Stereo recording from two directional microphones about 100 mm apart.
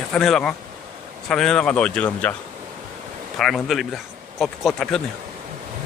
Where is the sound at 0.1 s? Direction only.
5° left (ahead or behind).